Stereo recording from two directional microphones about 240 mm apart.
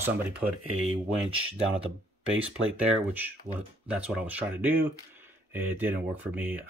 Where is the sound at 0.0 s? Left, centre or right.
Centre.